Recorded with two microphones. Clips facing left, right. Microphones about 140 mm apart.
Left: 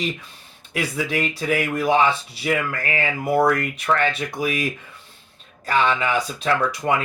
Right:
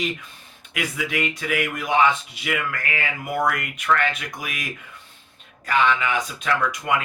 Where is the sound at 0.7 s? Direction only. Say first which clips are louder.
Left 3 dB; 35° left (ahead or behind).